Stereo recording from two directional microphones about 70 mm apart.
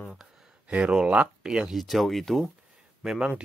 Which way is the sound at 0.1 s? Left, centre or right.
Centre.